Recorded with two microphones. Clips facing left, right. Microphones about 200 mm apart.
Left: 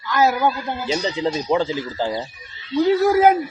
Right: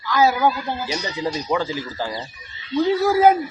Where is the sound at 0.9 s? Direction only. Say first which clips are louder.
Left 8 dB; 25° left (ahead or behind).